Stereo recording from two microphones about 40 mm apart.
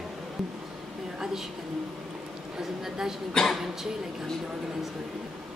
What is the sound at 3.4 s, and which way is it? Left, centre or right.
Speech, centre.